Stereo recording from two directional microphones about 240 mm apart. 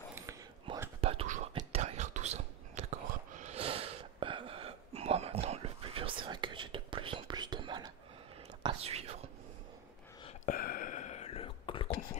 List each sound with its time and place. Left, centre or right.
0.1 s whispering: centre
1.0 s whispering: right
10.2 s whispering: left